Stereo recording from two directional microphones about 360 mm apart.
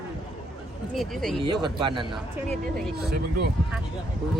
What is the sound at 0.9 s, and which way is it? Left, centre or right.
Speech, centre.